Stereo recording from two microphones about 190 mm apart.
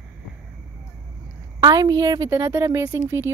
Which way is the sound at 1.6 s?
20° right (ahead or behind).